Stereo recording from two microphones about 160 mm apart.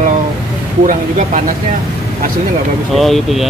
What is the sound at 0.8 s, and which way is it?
Speech, 55° right (ahead or behind).